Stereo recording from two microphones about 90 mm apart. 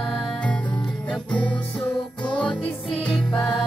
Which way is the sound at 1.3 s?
15° left (ahead or behind).